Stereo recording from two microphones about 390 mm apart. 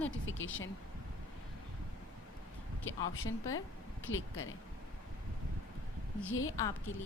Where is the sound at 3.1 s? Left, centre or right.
Left.